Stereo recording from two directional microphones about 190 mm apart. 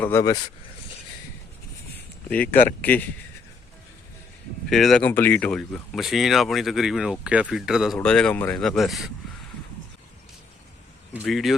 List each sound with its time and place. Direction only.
0.0 s speech: 15° left (ahead or behind)
2.3 s speech: 5° left (ahead or behind)
4.7 s speech: centre (ahead or behind)
11.3 s speech: centre (ahead or behind)